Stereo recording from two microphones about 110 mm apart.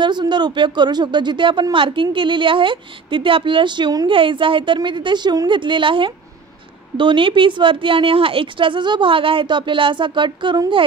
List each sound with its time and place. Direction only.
0.0 s speech: 45° right (ahead or behind)
4.1 s speech: 50° right (ahead or behind)